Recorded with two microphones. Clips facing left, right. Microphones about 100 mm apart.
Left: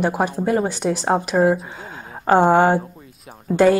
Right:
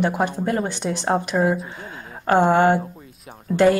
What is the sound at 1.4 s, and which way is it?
Speech, centre (ahead or behind).